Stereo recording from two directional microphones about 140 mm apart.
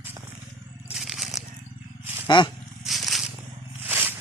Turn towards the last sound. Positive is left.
turn(degrees=-15)  # may be behind; listen again after turning